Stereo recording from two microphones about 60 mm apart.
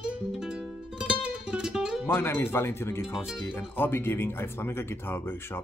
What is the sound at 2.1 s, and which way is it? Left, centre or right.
Speech, left.